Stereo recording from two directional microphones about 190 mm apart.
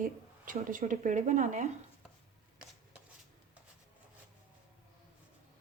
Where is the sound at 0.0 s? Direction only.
45° right (ahead or behind).